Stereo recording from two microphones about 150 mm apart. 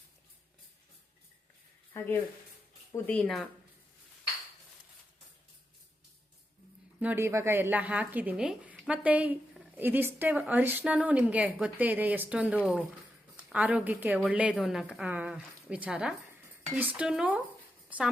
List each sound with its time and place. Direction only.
1.9 s speech: 15° left (ahead or behind)
3.1 s a woman's voice: 5° left (ahead or behind)
7.0 s a woman's voice: 15° right (ahead or behind)